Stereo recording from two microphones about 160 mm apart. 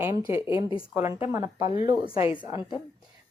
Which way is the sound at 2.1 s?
35° left (ahead or behind).